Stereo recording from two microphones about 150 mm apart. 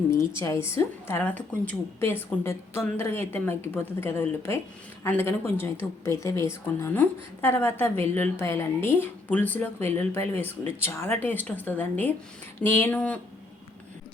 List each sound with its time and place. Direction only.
0.1 s a woman's voice: 20° left (ahead or behind)